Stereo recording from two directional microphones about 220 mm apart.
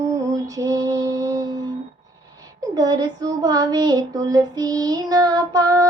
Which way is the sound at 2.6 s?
15° right (ahead or behind).